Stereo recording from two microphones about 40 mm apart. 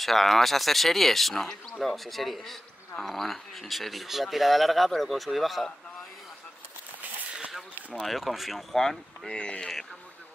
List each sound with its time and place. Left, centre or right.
0.0 s speech: centre
8.0 s speech: centre
9.3 s speech: left
9.6 s speech: centre